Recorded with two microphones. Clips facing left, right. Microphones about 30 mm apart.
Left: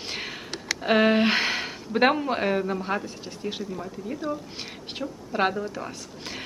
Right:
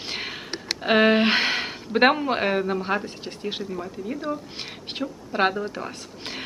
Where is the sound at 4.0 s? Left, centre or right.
Centre.